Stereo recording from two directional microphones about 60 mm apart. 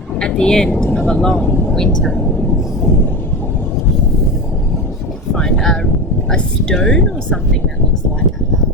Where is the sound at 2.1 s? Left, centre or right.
Left.